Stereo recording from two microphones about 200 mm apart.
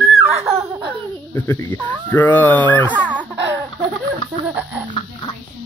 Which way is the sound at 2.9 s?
5° right (ahead or behind).